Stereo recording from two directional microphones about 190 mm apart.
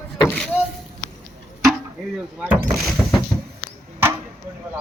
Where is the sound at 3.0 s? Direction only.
10° left (ahead or behind).